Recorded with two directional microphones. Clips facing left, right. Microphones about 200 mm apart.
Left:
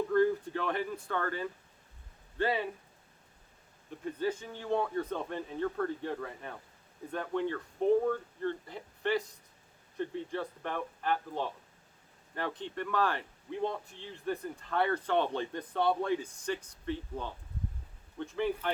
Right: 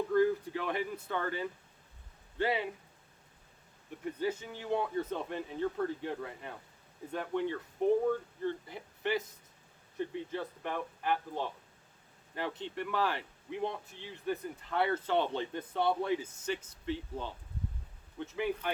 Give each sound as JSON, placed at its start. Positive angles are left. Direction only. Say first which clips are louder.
{"t": 0.1, "sound": "speech", "louder": "even", "side_deg": -10}
{"t": 4.2, "sound": "speech", "louder": "left 1 dB", "side_deg": -10}
{"t": 16.5, "sound": "speech", "louder": "left 1 dB", "side_deg": -20}
{"t": 18.3, "sound": "speech", "louder": "left 2 dB", "side_deg": -10}